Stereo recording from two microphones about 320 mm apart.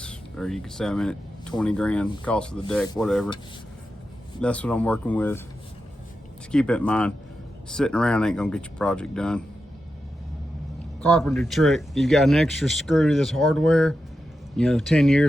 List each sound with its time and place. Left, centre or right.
0.0 s speech: centre
4.4 s speech: centre
6.5 s speech: centre
11.0 s speech: centre